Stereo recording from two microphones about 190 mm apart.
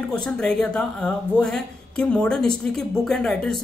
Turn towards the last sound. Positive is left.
turn(degrees=5)  # may be behind; listen again after turning